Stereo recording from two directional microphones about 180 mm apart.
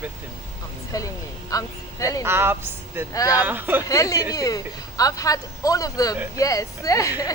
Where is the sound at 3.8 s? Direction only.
20° left (ahead or behind).